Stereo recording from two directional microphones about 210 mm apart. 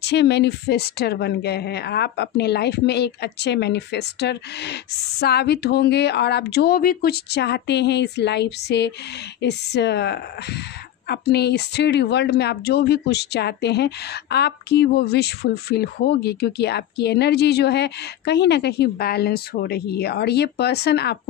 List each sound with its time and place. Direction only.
0.0 s speech: 55° left (ahead or behind)